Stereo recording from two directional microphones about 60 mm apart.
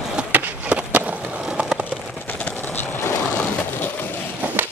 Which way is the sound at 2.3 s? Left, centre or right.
Left.